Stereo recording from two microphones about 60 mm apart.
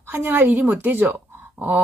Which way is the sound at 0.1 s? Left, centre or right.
Right.